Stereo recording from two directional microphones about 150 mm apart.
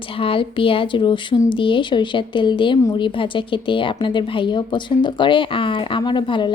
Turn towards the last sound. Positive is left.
turn(degrees=30)  # may be behind; listen again after turning